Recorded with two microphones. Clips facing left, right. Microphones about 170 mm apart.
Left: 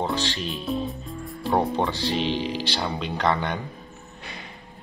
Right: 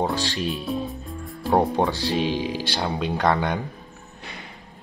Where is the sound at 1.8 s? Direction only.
10° right (ahead or behind).